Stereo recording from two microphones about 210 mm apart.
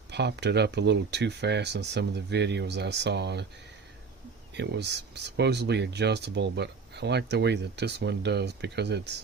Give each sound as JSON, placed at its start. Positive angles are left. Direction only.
{"t": 0.1, "sound": "speech", "side_deg": -55}
{"t": 4.5, "sound": "speech", "side_deg": -55}